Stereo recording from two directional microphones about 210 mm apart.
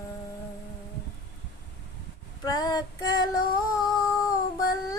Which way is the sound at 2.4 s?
20° left (ahead or behind).